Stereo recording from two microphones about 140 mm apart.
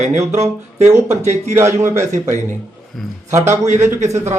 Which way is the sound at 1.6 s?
20° right (ahead or behind).